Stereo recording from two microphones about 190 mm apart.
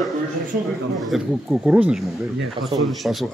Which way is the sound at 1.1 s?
5° right (ahead or behind).